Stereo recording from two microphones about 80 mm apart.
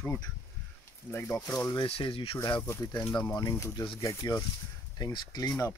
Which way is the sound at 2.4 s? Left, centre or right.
Left.